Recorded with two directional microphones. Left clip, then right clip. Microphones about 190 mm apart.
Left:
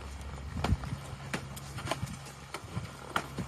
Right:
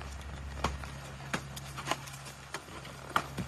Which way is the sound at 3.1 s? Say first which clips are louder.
Right 2 dB; centre (ahead or behind).